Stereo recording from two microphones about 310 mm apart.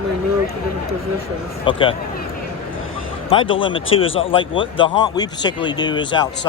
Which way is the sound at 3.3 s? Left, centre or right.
Centre.